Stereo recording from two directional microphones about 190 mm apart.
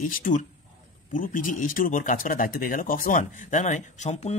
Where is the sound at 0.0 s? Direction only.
40° left (ahead or behind).